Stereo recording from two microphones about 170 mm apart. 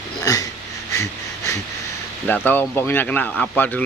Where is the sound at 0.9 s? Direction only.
20° left (ahead or behind).